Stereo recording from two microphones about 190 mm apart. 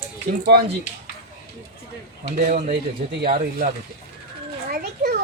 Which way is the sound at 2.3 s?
45° right (ahead or behind).